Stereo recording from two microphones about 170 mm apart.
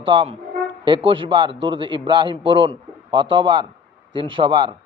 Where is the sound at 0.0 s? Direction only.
30° right (ahead or behind).